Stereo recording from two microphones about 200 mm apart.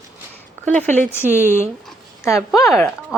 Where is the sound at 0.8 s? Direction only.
10° left (ahead or behind).